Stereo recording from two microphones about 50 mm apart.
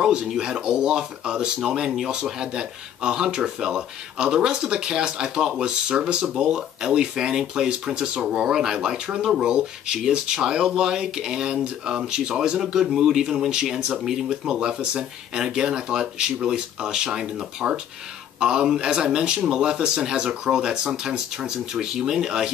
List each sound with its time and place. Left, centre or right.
0.0 s speech: centre